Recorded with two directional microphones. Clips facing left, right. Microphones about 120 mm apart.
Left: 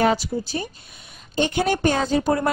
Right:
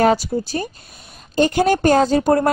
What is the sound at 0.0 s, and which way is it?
A woman's voice, 40° right (ahead or behind).